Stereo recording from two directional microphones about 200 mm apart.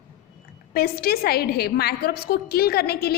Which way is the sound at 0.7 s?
50° left (ahead or behind).